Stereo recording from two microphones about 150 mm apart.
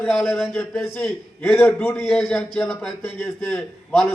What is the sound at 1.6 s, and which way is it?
Speech, 15° left (ahead or behind).